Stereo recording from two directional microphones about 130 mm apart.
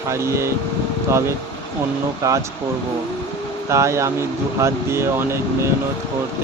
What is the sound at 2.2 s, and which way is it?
Speech, 25° right (ahead or behind).